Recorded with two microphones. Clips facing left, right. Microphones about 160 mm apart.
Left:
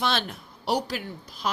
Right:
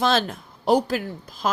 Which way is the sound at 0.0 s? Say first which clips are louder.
Right 6 dB; 45° right (ahead or behind).